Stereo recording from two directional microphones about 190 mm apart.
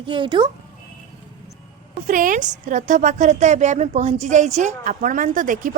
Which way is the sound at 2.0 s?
45° right (ahead or behind).